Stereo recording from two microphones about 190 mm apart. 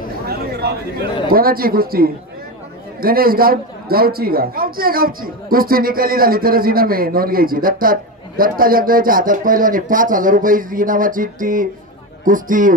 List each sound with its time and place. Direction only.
0.3 s chatter: 55° right (ahead or behind)
1.3 s a man's voice: 50° right (ahead or behind)